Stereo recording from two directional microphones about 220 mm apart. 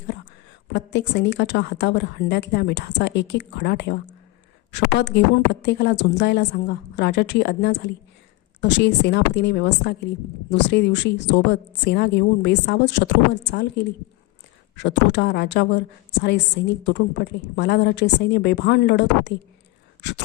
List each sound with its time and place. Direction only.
0.7 s a woman's voice: 50° left (ahead or behind)
14.8 s a woman's voice: 50° left (ahead or behind)
16.8 s a woman's voice: 50° left (ahead or behind)